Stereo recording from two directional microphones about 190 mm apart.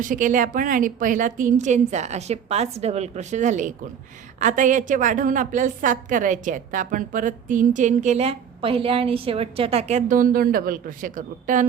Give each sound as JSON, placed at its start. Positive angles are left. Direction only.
{"t": 0.0, "sound": "a woman's voice", "side_deg": -45}